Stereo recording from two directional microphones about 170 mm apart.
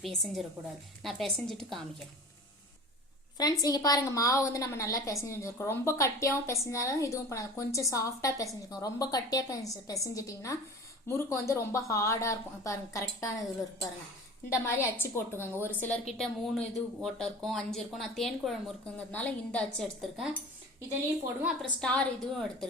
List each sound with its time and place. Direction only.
0.0 s speech: centre (ahead or behind)
3.3 s a woman's voice: 20° left (ahead or behind)
14.5 s a woman's voice: 15° left (ahead or behind)
21.4 s speech: 5° left (ahead or behind)